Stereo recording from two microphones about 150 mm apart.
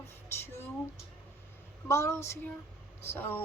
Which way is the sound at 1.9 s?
20° left (ahead or behind).